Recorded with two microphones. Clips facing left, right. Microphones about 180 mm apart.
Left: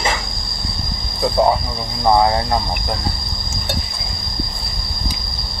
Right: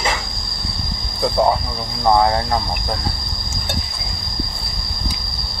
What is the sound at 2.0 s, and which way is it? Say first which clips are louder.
Speech: left 1 dB; 10° left (ahead or behind).